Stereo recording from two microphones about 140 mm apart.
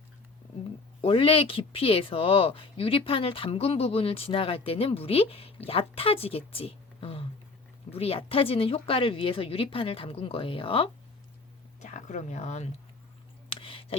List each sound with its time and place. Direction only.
1.0 s speech: 40° left (ahead or behind)
11.8 s speech: 55° left (ahead or behind)
13.5 s a sound: 40° left (ahead or behind)